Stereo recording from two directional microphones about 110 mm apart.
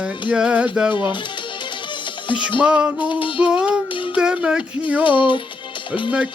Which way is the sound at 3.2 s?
50° left (ahead or behind).